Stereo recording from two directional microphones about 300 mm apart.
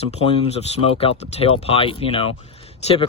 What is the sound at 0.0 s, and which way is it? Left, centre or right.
Speech, left.